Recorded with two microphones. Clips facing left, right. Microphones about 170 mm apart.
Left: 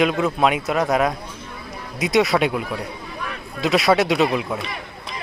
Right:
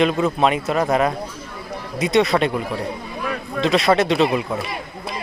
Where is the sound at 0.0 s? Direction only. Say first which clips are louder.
Right 1 dB; 5° left (ahead or behind).